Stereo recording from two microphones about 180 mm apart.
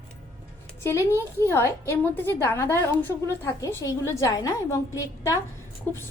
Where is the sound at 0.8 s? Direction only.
15° left (ahead or behind).